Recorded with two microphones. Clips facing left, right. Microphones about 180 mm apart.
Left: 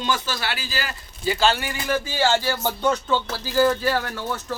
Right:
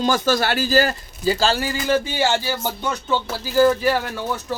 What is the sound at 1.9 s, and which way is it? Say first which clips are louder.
Speech: right 1 dB; 20° right (ahead or behind).